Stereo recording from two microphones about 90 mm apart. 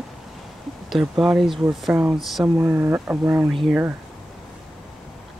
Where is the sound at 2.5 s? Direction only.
25° right (ahead or behind).